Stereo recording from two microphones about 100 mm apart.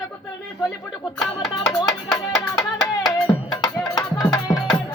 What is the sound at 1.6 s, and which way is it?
Music, 35° left (ahead or behind).